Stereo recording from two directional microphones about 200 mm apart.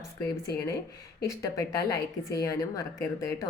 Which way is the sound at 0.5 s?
15° left (ahead or behind).